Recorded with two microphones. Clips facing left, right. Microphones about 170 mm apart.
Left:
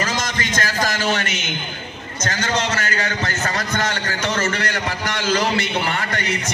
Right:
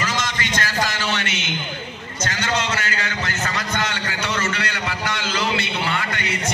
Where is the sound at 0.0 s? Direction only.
45° left (ahead or behind).